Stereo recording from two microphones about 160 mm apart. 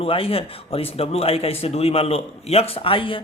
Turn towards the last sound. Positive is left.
turn(degrees=35)  # may be behind; listen again after turning